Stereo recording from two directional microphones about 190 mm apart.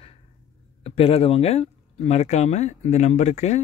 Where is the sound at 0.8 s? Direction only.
30° left (ahead or behind).